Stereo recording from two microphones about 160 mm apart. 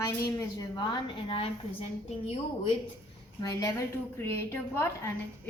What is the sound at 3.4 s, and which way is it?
A woman's voice, 20° left (ahead or behind).